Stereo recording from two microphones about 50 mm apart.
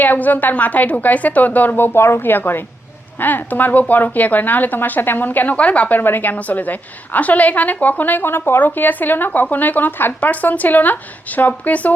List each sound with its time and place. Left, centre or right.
0.0 s a woman's voice: left
6.0 s a woman's voice: left